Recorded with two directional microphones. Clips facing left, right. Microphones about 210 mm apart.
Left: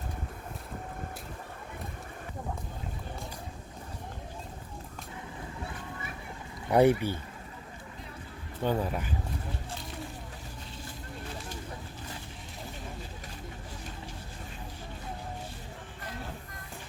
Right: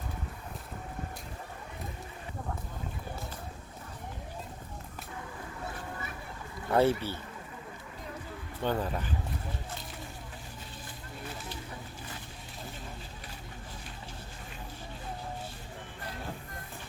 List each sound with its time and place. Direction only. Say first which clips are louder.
6.7 s speech: left 3 dB; 15° left (ahead or behind)
8.6 s speech: left 2 dB; 10° left (ahead or behind)